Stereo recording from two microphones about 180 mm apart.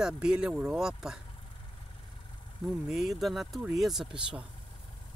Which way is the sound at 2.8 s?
Centre (ahead or behind).